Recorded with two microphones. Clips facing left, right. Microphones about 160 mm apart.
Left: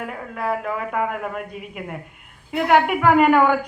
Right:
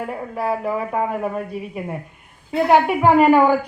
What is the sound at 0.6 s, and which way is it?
Speech, 30° right (ahead or behind).